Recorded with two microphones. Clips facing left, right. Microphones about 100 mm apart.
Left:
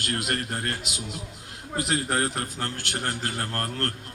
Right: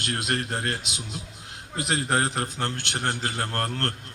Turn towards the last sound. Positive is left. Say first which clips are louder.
# right 1 dB
turn(degrees=-25)  # may be behind; listen again after turning